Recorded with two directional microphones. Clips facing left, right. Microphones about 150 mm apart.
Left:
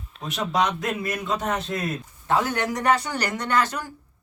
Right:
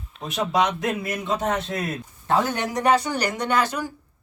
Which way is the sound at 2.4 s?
20° right (ahead or behind).